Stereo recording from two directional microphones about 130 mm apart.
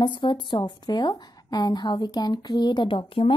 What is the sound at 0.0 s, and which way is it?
A woman's voice, 40° left (ahead or behind).